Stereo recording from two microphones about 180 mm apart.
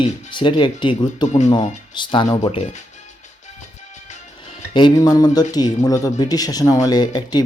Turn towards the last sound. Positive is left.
turn(degrees=20)  # may be behind; listen again after turning